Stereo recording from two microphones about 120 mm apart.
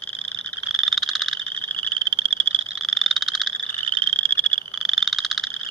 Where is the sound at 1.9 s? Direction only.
50° right (ahead or behind).